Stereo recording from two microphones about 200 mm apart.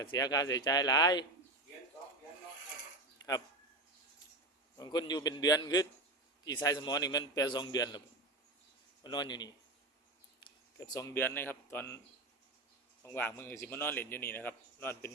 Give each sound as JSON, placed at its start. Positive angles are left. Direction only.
{"t": 0.2, "sound": "a man's voice", "side_deg": 20}
{"t": 4.8, "sound": "a man's voice", "side_deg": 20}
{"t": 9.0, "sound": "a man's voice", "side_deg": 20}
{"t": 10.8, "sound": "speech", "side_deg": 15}
{"t": 13.0, "sound": "speech", "side_deg": 10}